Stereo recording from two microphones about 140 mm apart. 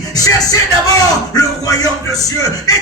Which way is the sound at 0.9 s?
25° left (ahead or behind).